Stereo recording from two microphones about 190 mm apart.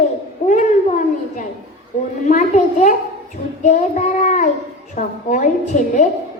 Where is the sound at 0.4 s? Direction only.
40° left (ahead or behind).